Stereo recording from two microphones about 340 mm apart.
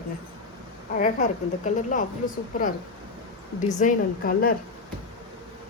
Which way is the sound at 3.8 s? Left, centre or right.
Left.